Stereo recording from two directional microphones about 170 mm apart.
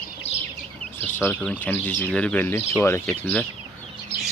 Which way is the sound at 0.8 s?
10° left (ahead or behind).